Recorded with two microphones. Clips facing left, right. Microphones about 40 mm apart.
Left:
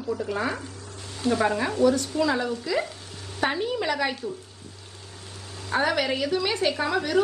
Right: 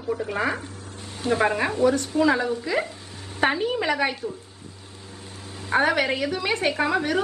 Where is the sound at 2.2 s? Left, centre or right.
Right.